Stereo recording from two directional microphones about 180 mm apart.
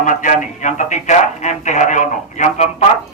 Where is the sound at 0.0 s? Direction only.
45° left (ahead or behind).